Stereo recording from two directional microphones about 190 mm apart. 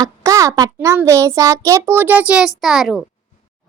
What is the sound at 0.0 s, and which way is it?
A child's voice, 15° right (ahead or behind).